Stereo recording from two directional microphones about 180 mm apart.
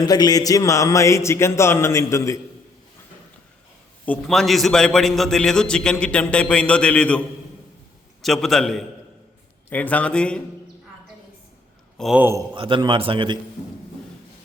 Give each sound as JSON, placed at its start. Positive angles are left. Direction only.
{"t": 0.0, "sound": "a man's voice", "side_deg": 20}
{"t": 4.0, "sound": "a man's voice", "side_deg": 5}
{"t": 8.2, "sound": "a man's voice", "side_deg": 0}
{"t": 11.9, "sound": "a man's voice", "side_deg": 0}
{"t": 12.5, "sound": "a man's voice", "side_deg": -30}